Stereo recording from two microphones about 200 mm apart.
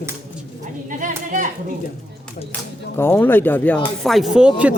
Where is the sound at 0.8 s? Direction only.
40° right (ahead or behind).